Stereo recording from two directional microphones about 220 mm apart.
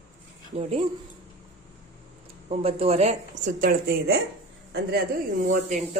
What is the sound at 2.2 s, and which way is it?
Speech, 25° right (ahead or behind).